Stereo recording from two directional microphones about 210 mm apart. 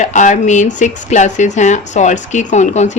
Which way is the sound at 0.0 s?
35° left (ahead or behind).